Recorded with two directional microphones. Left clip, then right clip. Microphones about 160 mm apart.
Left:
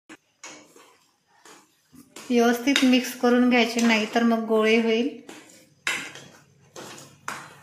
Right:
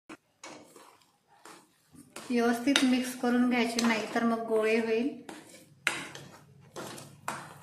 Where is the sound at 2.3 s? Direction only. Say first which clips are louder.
Left 6 dB; 40° left (ahead or behind).